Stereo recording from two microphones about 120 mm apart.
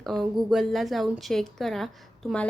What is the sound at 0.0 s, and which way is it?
A woman's voice, centre (ahead or behind).